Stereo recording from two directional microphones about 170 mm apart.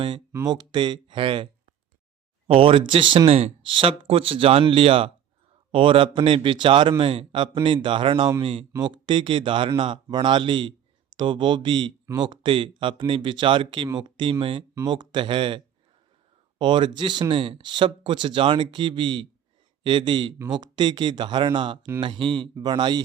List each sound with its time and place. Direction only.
0.3 s speech: 25° right (ahead or behind)
2.5 s speech: 35° right (ahead or behind)